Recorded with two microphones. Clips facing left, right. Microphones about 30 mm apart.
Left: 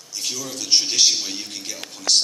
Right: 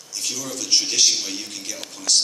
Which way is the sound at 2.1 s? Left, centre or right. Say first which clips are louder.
Left 1 dB; left.